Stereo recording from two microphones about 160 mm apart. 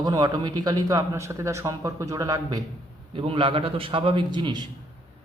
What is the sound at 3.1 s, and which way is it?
A man's voice, 35° right (ahead or behind).